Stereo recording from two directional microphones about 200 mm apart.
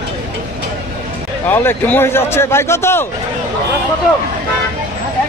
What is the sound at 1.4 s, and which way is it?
A man's voice, 10° left (ahead or behind).